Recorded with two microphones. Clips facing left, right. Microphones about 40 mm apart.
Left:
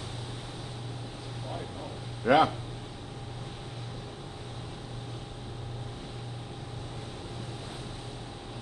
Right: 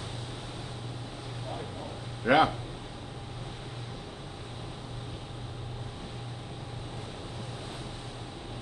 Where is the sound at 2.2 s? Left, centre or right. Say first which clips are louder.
Even; centre.